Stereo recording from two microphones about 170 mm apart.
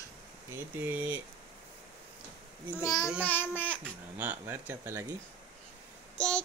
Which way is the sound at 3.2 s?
10° left (ahead or behind).